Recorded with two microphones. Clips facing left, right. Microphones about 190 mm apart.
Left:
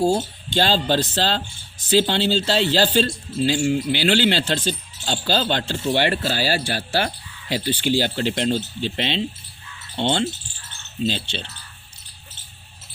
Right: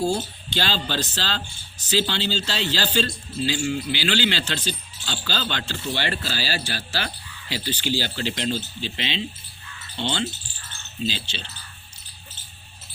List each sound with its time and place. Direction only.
0.0 s speech: 45° left (ahead or behind)
9.9 s insect: 55° left (ahead or behind)
11.0 s speech: 55° left (ahead or behind)